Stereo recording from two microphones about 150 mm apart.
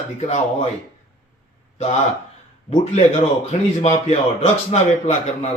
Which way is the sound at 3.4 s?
50° left (ahead or behind).